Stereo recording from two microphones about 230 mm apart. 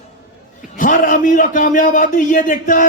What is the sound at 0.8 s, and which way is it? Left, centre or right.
A man's voice, left.